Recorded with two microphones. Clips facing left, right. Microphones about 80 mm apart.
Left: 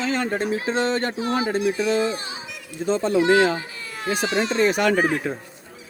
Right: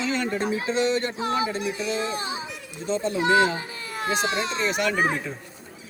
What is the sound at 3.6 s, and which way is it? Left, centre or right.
Baby cry, right.